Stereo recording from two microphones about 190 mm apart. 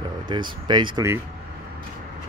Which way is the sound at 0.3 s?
25° right (ahead or behind).